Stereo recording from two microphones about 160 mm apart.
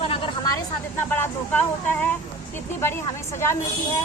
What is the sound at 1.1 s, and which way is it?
Speech, 10° left (ahead or behind).